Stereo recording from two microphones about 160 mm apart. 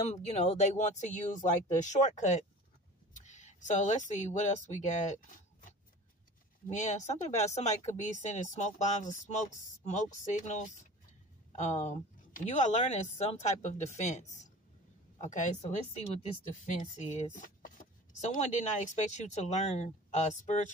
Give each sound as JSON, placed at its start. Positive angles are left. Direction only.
{"t": 0.1, "sound": "speech", "side_deg": 45}
{"t": 6.7, "sound": "speech", "side_deg": 50}